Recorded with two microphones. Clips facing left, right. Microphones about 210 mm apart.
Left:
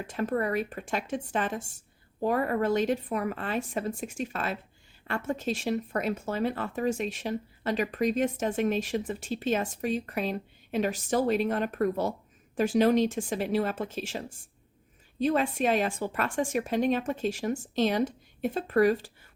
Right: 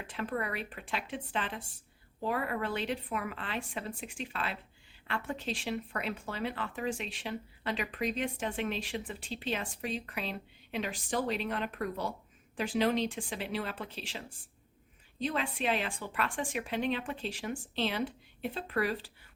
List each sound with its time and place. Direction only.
0.1 s speech: 45° left (ahead or behind)